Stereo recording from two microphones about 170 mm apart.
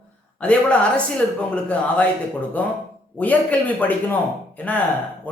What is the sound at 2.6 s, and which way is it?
Speech, 10° left (ahead or behind).